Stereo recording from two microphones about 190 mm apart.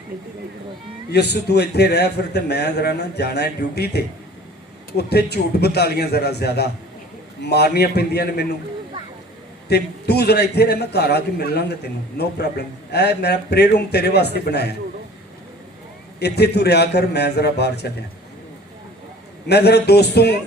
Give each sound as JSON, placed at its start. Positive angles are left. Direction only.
{"t": 1.1, "sound": "a man's voice", "side_deg": 60}
{"t": 9.6, "sound": "a man's voice", "side_deg": 60}
{"t": 16.2, "sound": "a man's voice", "side_deg": 60}
{"t": 19.5, "sound": "a man's voice", "side_deg": 60}